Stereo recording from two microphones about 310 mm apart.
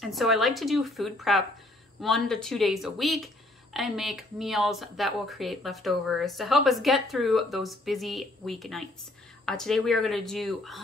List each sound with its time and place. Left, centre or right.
0.0 s speech: centre